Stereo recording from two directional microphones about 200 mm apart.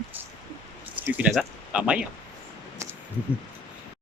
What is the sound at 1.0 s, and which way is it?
Speech, 5° right (ahead or behind).